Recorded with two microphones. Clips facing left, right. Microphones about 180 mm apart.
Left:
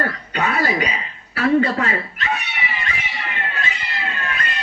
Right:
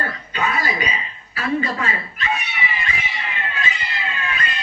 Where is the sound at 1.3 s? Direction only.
70° left (ahead or behind).